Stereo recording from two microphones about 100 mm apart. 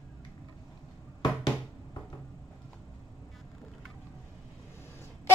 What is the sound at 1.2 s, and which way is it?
Bouncing, 45° left (ahead or behind).